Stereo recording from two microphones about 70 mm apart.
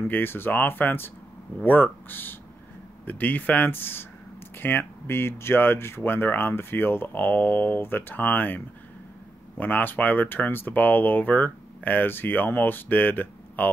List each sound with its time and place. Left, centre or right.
0.1 s speech: left